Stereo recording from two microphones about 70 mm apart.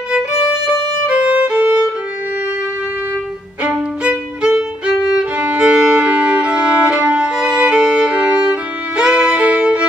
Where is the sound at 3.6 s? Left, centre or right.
Centre.